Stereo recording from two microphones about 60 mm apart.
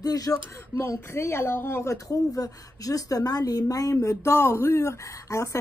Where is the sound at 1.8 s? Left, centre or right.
Left.